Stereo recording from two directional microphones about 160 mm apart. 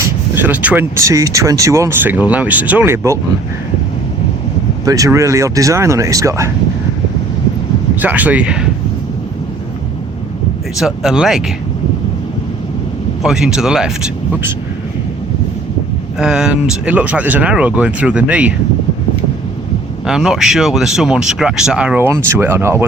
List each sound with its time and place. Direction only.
0.0 s speech: 10° right (ahead or behind)
4.9 s speech: 20° right (ahead or behind)
8.0 s speech: 10° right (ahead or behind)
10.8 s speech: 5° right (ahead or behind)
13.2 s speech: 5° right (ahead or behind)
16.1 s speech: 5° right (ahead or behind)
20.1 s speech: 5° right (ahead or behind)